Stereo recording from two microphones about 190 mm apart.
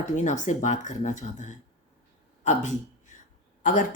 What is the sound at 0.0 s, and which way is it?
Speech, 40° left (ahead or behind).